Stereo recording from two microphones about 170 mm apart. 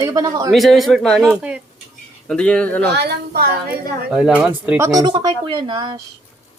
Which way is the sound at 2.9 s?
70° right (ahead or behind).